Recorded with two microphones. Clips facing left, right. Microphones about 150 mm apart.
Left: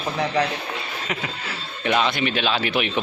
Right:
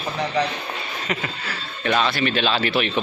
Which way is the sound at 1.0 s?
5° left (ahead or behind).